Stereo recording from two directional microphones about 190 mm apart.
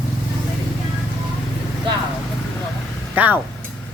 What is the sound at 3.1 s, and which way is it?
Speech, 10° right (ahead or behind).